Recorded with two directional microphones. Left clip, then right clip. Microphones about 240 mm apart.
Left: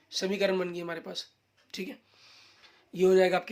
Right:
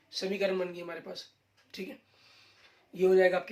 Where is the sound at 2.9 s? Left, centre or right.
Left.